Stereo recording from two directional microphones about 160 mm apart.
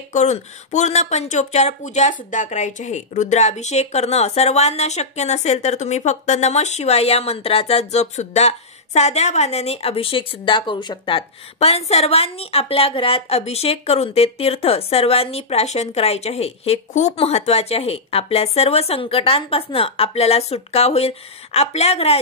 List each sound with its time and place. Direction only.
0.1 s speech: 45° left (ahead or behind)